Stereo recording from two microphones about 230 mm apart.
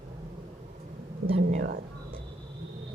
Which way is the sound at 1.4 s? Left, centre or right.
Right.